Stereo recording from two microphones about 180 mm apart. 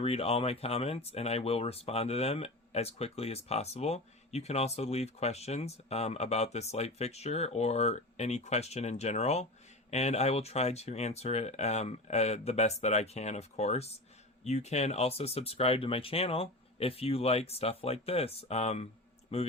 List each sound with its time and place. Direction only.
0.0 s speech: 35° left (ahead or behind)